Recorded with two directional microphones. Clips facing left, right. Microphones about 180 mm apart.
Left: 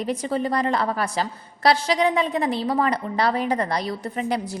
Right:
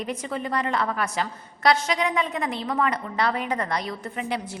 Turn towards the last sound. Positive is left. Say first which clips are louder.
# left 4 dB
turn(degrees=35)  # may be behind; listen again after turning